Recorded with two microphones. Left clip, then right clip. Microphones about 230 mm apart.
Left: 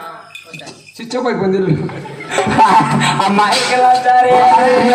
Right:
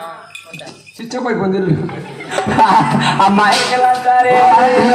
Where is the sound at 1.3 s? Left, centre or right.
Left.